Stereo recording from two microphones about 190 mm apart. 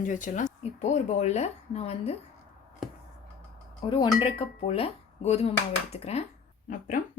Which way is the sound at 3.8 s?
25° left (ahead or behind).